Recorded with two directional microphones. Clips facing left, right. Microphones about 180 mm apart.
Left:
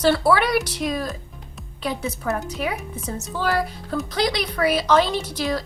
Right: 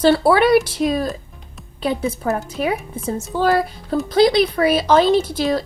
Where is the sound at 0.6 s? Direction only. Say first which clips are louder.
Right 6 dB; 30° right (ahead or behind).